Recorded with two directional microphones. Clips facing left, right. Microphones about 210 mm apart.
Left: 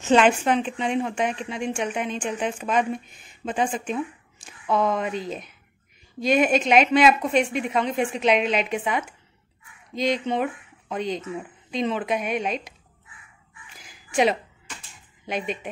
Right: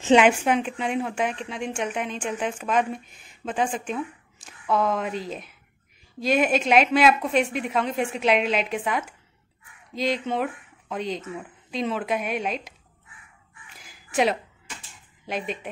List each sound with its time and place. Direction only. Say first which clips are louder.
0.1 s a woman's voice: right 1 dB; 10° right (ahead or behind)
13.8 s a sound: left 2 dB; centre (ahead or behind)
15.2 s a woman's voice: left 1 dB; centre (ahead or behind)